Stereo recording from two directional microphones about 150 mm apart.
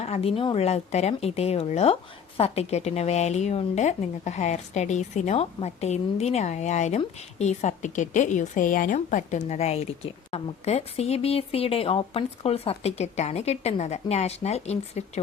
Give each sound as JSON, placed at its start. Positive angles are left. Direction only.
{"t": 0.0, "sound": "speech", "side_deg": 40}